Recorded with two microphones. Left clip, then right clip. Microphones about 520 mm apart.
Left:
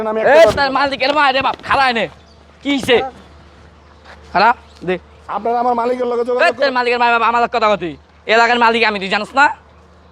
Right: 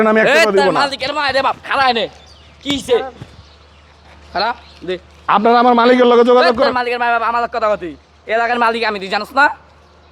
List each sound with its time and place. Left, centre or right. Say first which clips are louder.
0.0 s a man's voice: right 6 dB; right
0.3 s a man's voice: left 2 dB; centre
0.8 s speech: left 3 dB; centre
4.3 s a man's voice: left 6 dB; left
5.2 s a man's voice: right 7 dB; right
6.4 s a man's voice: right 1 dB; centre